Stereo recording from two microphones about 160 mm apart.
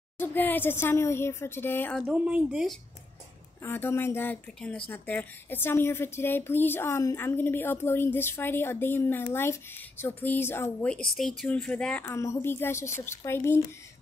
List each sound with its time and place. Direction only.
0.2 s a woman's voice: 10° left (ahead or behind)
2.0 s speech: 10° right (ahead or behind)
3.6 s a woman's voice: 15° left (ahead or behind)
12.1 s a woman's voice: 20° left (ahead or behind)